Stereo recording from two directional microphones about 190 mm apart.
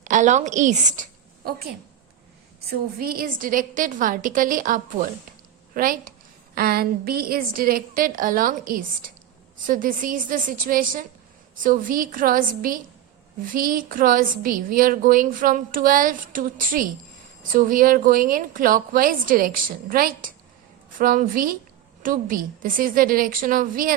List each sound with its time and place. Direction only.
0.0 s a woman's voice: 40° right (ahead or behind)
1.5 s a woman's voice: 55° right (ahead or behind)